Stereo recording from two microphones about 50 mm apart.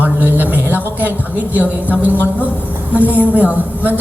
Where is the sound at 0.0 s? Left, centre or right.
Right.